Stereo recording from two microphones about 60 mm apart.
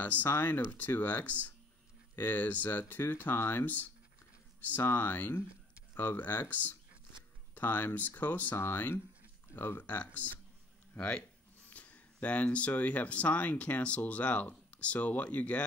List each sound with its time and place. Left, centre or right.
0.0 s speech: left
11.0 s speech: centre